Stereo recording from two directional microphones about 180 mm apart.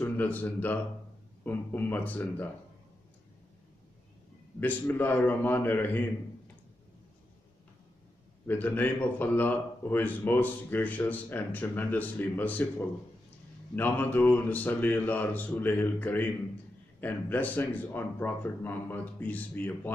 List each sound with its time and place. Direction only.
0.0 s a man's voice: 10° left (ahead or behind)
4.6 s a man's voice: 10° left (ahead or behind)
8.5 s a man's voice: 10° left (ahead or behind)